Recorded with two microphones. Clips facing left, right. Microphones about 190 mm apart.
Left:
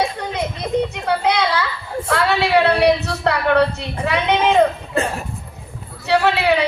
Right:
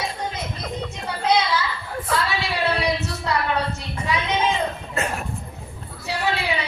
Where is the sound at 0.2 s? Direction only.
65° left (ahead or behind).